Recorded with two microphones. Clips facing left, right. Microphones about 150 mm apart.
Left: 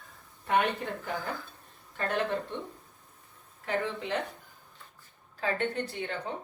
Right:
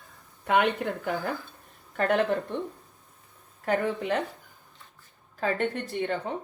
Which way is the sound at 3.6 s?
50° right (ahead or behind).